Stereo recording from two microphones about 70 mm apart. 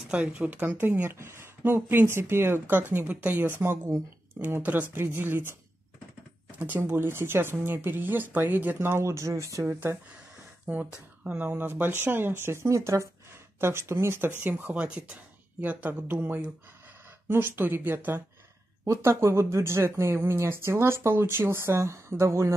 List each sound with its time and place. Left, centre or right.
0.1 s speech: centre
6.6 s speech: right
8.7 s speech: right
9.7 s speech: right
10.7 s speech: right
18.9 s speech: right